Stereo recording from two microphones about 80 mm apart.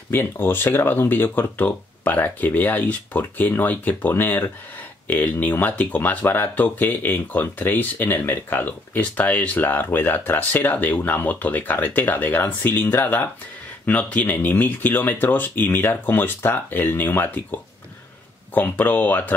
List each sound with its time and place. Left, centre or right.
0.1 s speech: left